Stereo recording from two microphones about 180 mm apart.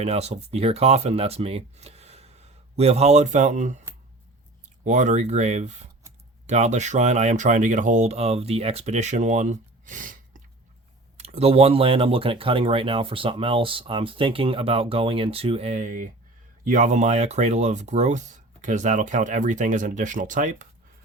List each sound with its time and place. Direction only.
0.0 s speech: 35° right (ahead or behind)
11.2 s speech: 35° right (ahead or behind)